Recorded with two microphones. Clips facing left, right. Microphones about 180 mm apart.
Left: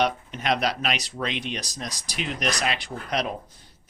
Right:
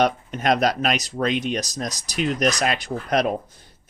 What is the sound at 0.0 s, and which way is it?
Speech, 45° right (ahead or behind).